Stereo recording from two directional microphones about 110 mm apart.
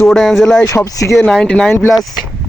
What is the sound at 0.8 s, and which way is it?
Speech, 30° left (ahead or behind).